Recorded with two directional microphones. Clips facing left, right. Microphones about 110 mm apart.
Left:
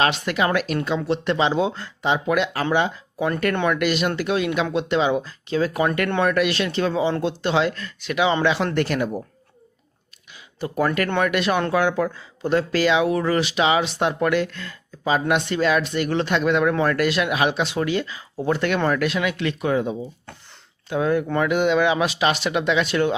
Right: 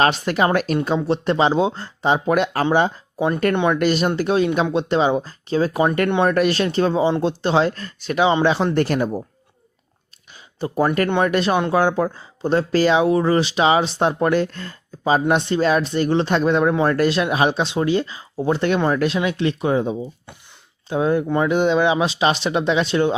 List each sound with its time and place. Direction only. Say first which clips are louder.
0.0 s speech: right 3 dB; 40° right (ahead or behind)
3.2 s speech: right 3 dB; 20° right (ahead or behind)
3.8 s speech: right 3 dB; 35° right (ahead or behind)
10.6 s speech: right 3 dB; 30° right (ahead or behind)